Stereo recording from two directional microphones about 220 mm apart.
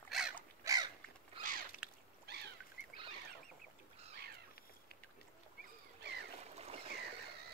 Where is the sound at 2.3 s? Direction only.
50° right (ahead or behind).